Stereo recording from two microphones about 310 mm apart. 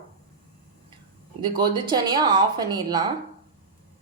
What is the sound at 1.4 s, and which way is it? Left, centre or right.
A woman's voice, centre.